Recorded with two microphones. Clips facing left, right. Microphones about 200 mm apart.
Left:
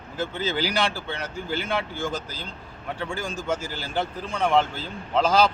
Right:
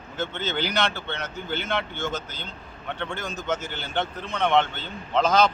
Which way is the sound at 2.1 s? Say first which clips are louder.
Left 1 dB; 30° left (ahead or behind).